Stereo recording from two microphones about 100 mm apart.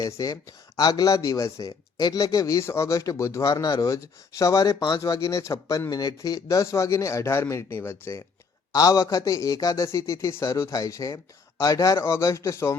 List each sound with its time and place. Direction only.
0.0 s speech: 35° left (ahead or behind)